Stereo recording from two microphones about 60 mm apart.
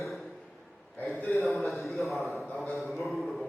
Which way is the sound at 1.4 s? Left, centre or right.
Centre.